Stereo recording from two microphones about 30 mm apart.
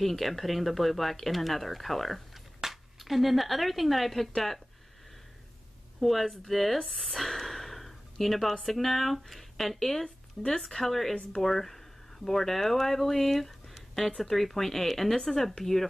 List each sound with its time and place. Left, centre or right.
0.0 s speech: centre
2.3 s a sound: centre
5.9 s speech: centre
6.9 s a sound: centre
8.6 s speech: centre
10.0 s speech: left
10.7 s speech: centre